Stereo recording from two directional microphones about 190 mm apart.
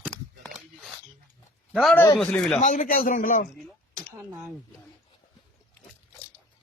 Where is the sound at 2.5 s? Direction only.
45° left (ahead or behind).